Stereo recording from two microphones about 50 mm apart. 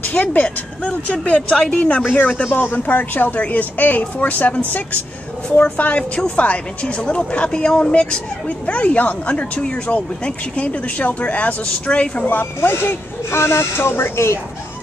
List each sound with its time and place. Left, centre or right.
0.0 s a woman's voice: left
12.5 s speech: left